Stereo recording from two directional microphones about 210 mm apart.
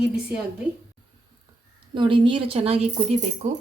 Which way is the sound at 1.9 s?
25° right (ahead or behind).